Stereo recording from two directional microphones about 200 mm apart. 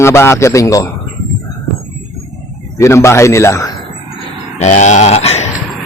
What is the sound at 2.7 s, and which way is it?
Speech, 15° left (ahead or behind).